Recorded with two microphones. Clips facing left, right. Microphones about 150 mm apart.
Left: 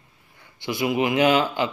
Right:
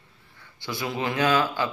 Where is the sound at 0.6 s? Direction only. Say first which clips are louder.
Left 6 dB; 20° left (ahead or behind).